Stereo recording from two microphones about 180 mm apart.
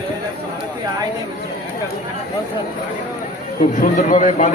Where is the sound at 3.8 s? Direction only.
45° left (ahead or behind).